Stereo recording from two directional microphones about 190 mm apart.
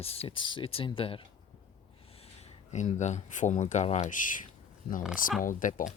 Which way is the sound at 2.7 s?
40° left (ahead or behind).